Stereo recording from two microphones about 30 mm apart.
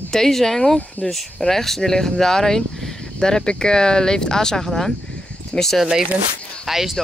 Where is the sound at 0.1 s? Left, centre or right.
Centre.